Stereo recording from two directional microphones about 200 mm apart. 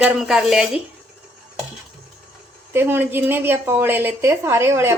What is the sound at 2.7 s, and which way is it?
A woman's voice, 10° right (ahead or behind).